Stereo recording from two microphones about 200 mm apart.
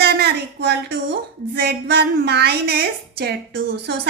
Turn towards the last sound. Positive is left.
turn(degrees=-55)  # may be behind; listen again after turning